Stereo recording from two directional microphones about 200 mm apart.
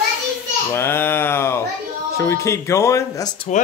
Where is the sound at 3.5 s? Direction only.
35° left (ahead or behind).